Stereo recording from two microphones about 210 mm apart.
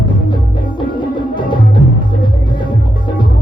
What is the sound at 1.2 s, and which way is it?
Music, 20° left (ahead or behind).